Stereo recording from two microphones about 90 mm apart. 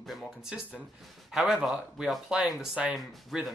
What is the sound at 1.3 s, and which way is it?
Speech, 5° right (ahead or behind).